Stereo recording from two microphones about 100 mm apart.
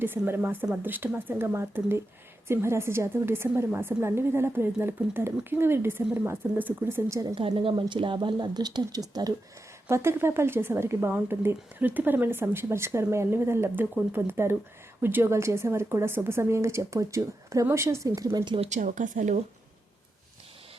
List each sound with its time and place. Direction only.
0.0 s a woman's voice: 20° right (ahead or behind)
7.3 s speech: 60° right (ahead or behind); by 9.3 s 40° right (ahead or behind)
9.9 s a woman's voice: 25° right (ahead or behind)